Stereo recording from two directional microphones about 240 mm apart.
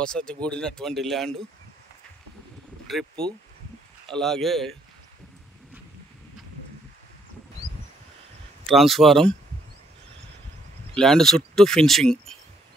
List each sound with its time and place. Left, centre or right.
0.0 s speech: centre
2.9 s speech: centre
4.1 s speech: centre
8.6 s speech: centre
11.0 s speech: centre